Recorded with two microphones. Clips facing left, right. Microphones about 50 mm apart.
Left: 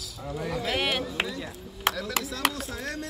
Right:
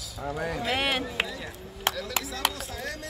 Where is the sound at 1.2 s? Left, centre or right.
Centre.